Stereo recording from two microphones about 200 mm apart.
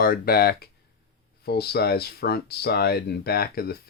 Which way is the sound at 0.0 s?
50° left (ahead or behind).